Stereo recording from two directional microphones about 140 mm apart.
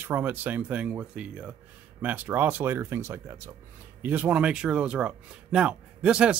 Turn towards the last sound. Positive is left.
turn(degrees=-5)  # may be behind; listen again after turning